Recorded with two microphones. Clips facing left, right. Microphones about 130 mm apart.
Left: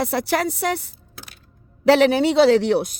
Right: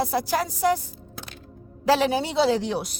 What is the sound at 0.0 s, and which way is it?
A woman's voice, 75° left (ahead or behind).